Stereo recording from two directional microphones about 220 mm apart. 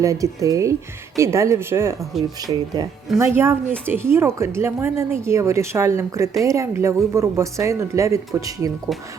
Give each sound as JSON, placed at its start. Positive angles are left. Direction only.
{"t": 0.0, "sound": "a woman's voice", "side_deg": -15}